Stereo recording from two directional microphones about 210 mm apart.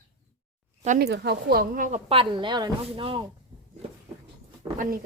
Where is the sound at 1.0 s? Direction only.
50° right (ahead or behind); by 3.2 s 25° right (ahead or behind).